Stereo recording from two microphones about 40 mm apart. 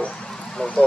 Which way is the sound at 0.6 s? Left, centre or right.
Left.